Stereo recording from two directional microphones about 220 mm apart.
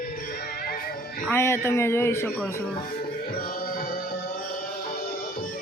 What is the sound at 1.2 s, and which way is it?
A man's voice, 10° left (ahead or behind).